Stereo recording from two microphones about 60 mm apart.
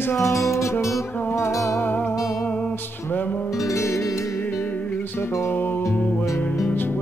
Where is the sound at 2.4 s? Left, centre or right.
Left.